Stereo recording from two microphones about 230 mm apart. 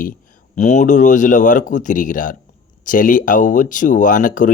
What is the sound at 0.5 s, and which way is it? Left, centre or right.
Speech, left.